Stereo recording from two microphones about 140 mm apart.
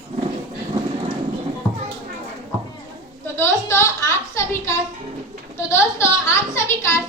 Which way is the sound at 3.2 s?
15° left (ahead or behind).